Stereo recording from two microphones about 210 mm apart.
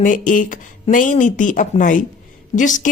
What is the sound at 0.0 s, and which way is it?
A woman's voice, 40° left (ahead or behind).